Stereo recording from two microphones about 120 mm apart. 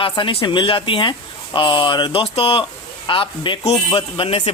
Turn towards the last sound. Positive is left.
turn(degrees=50)  # may be behind; listen again after turning